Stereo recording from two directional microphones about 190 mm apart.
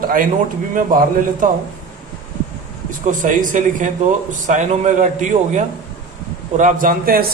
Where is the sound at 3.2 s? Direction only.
45° right (ahead or behind).